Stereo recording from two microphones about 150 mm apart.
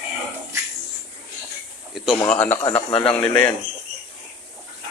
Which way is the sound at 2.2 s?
10° left (ahead or behind).